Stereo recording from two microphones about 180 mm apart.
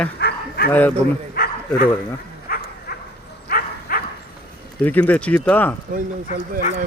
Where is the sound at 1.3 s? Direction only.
60° left (ahead or behind).